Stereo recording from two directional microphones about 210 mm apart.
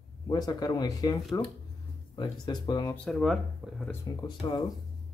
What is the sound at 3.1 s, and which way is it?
Speech, centre (ahead or behind).